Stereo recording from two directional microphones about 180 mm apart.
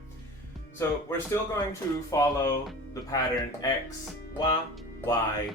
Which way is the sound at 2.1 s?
20° left (ahead or behind).